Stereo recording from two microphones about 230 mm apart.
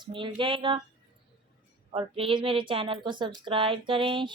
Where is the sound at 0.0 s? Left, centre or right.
Right.